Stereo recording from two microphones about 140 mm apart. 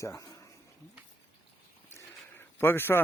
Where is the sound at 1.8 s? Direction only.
15° left (ahead or behind).